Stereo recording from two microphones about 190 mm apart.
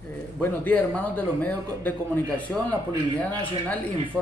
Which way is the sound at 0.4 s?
10° left (ahead or behind).